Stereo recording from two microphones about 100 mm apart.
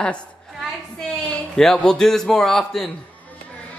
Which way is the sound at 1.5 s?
5° left (ahead or behind).